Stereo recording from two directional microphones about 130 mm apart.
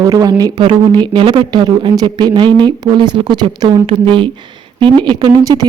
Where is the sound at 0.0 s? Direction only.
30° right (ahead or behind).